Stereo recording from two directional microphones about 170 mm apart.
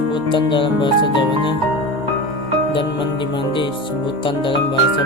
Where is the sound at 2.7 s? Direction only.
30° left (ahead or behind).